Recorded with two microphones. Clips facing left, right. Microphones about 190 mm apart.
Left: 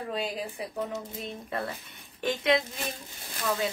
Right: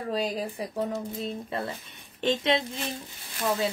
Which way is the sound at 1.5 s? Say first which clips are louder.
Right 1 dB; 25° right (ahead or behind).